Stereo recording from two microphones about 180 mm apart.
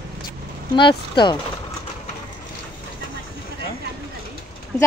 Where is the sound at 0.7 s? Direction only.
25° left (ahead or behind).